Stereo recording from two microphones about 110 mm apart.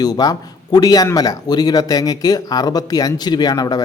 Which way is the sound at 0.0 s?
35° left (ahead or behind).